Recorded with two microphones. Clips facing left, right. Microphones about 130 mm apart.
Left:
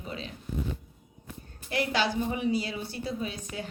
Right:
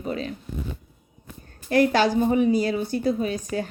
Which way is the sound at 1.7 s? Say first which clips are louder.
Right 9 dB; 45° right (ahead or behind).